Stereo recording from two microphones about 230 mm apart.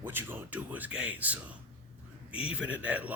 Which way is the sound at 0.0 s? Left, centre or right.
Centre.